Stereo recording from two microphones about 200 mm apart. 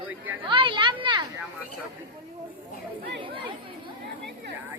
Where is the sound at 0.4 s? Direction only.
25° right (ahead or behind).